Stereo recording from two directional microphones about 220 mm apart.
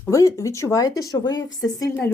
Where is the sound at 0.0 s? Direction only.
15° left (ahead or behind).